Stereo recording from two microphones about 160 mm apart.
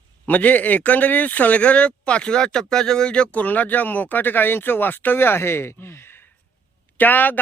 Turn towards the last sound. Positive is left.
turn(degrees=10)  # may be behind; listen again after turning